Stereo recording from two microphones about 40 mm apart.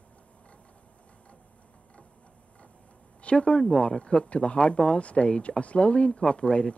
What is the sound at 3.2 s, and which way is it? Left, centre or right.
Speech, left.